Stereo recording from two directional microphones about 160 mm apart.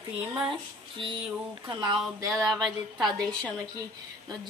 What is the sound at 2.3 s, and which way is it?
A woman's voice, centre (ahead or behind).